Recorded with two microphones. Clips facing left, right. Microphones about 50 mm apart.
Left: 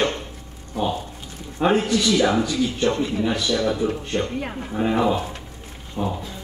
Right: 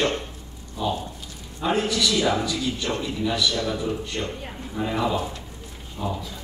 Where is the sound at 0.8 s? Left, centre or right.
Left.